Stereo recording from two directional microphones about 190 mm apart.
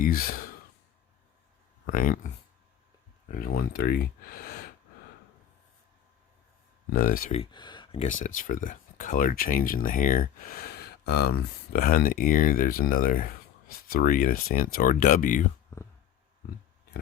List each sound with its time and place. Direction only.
0.0 s speech: 50° left (ahead or behind)
1.9 s speech: 45° left (ahead or behind)
3.3 s speech: 50° left (ahead or behind)
6.9 s speech: 50° left (ahead or behind)
7.5 s speech: 25° left (ahead or behind)
8.0 s speech: 40° left (ahead or behind)